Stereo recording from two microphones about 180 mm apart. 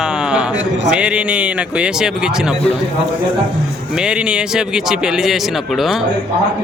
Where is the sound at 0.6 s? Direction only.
80° right.